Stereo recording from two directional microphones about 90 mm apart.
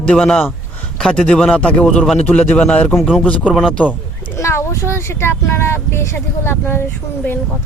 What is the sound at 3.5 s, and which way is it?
Speech, centre (ahead or behind).